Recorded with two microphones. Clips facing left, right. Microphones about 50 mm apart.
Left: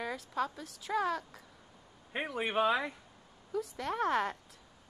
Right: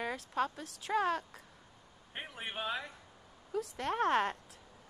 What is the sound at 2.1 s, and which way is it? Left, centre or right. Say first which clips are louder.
Speech: left 9 dB; left.